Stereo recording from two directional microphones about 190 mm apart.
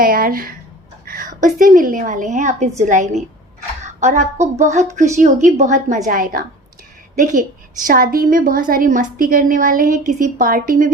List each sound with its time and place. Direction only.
0.0 s a woman's voice: 50° right (ahead or behind)